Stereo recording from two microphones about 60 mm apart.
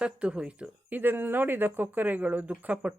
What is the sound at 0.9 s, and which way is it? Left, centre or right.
Speech, right.